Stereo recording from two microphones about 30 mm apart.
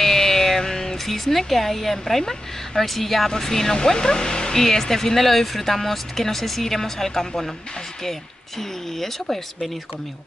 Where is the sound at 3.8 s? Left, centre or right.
Left; by 9.8 s centre.